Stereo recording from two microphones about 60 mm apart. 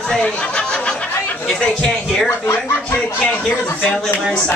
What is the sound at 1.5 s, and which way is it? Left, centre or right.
Speech, centre.